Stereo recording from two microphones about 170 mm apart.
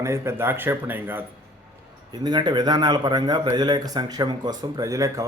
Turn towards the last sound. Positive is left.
turn(degrees=-20)  # may be behind; listen again after turning